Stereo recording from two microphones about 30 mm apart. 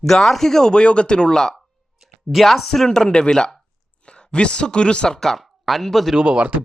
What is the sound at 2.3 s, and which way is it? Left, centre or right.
Speech, centre.